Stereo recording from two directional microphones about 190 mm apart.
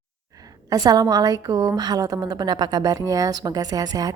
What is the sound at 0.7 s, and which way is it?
Speech, 20° right (ahead or behind).